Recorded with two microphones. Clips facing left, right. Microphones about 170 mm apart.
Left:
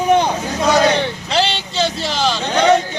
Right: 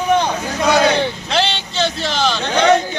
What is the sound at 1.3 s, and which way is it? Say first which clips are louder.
Speech: left 1 dB; 5° left (ahead or behind).